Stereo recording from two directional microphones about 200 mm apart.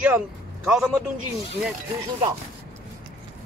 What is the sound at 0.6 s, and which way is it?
Speech, 5° right (ahead or behind).